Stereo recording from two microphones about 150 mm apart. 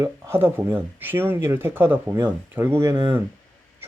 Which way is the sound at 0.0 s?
15° right (ahead or behind).